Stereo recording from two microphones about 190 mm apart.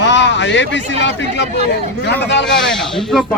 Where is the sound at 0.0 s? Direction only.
70° left (ahead or behind).